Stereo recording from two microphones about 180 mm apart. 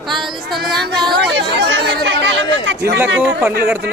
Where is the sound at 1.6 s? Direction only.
85° right.